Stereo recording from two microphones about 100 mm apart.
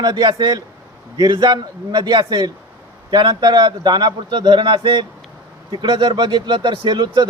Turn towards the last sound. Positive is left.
turn(degrees=-50)  # may be behind; listen again after turning